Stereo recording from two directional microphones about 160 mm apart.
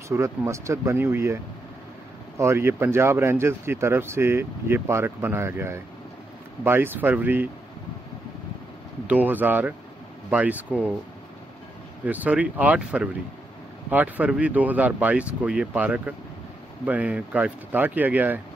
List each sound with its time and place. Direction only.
0.1 s speech: 20° right (ahead or behind)
9.0 s speech: 10° right (ahead or behind)
12.0 s speech: 10° right (ahead or behind)